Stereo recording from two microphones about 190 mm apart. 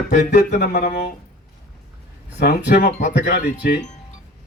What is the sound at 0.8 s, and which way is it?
Speech, 45° left (ahead or behind).